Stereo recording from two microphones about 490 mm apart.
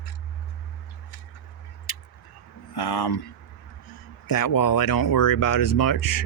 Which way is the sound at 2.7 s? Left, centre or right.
Left.